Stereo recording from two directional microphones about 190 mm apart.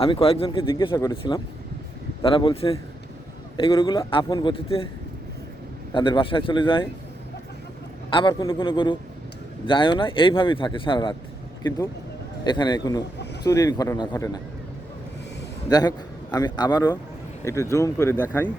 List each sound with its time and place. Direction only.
0.0 s a man's voice: 30° left (ahead or behind)
5.9 s a man's voice: 25° left (ahead or behind)
8.1 s a man's voice: 25° left (ahead or behind)
12.5 s a man's voice: 25° left (ahead or behind)
15.7 s a man's voice: 20° left (ahead or behind)